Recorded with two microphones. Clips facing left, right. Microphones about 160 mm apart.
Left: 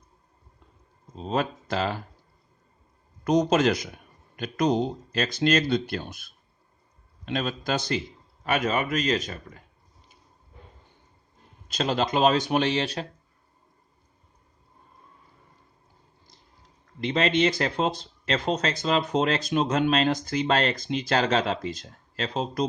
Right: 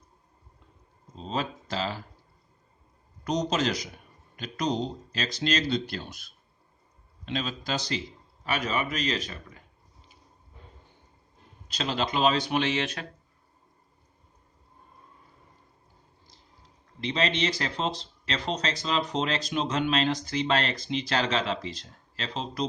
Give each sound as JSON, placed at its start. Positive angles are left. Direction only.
{"t": 1.2, "sound": "a man's voice", "side_deg": 55}
{"t": 3.2, "sound": "a man's voice", "side_deg": 55}
{"t": 11.7, "sound": "speech", "side_deg": 45}
{"t": 17.0, "sound": "speech", "side_deg": 50}